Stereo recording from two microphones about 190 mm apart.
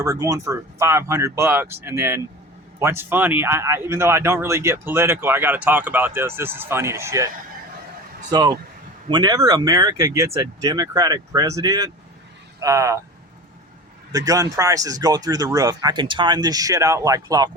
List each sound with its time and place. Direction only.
0.0 s speech: 15° right (ahead or behind)
8.3 s speech: 20° right (ahead or behind)
14.1 s speech: 20° right (ahead or behind)